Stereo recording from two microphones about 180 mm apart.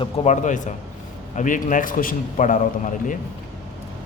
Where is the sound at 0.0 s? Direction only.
40° left (ahead or behind).